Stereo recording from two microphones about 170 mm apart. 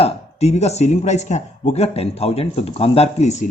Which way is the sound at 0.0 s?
40° left (ahead or behind).